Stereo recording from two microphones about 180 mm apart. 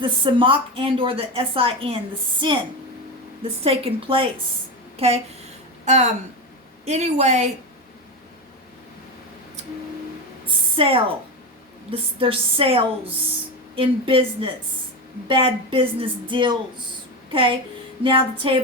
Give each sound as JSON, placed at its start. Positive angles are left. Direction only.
{"t": 0.0, "sound": "a woman's voice", "side_deg": -30}
{"t": 3.4, "sound": "a woman's voice", "side_deg": -30}
{"t": 10.4, "sound": "a sound", "side_deg": -30}
{"t": 11.9, "sound": "a woman's voice", "side_deg": -30}
{"t": 18.0, "sound": "speech", "side_deg": -30}